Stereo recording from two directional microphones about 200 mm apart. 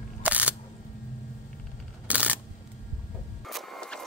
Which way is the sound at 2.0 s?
5° right (ahead or behind).